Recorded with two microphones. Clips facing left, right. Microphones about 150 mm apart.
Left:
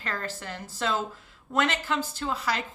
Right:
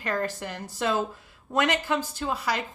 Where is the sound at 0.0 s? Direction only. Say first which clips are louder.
Right 6 dB; 15° right (ahead or behind).